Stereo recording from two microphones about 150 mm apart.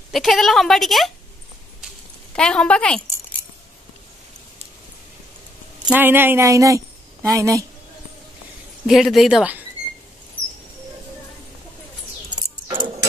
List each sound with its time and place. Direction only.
0.1 s a woman's voice: centre (ahead or behind)
2.3 s a woman's voice: 5° left (ahead or behind)
5.9 s speech: 15° right (ahead or behind)
8.8 s a woman's voice: centre (ahead or behind)